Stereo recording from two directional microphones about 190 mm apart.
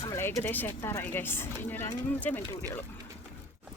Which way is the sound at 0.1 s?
15° left (ahead or behind).